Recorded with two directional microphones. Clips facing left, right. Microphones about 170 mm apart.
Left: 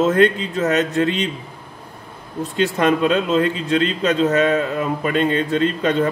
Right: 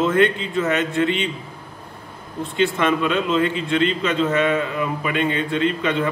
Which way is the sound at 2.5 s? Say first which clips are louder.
Left 2 dB; 40° left (ahead or behind).